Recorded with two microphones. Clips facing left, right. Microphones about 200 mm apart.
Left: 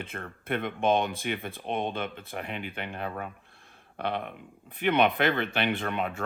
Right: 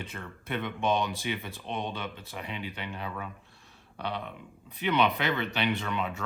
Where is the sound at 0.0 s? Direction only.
55° left (ahead or behind).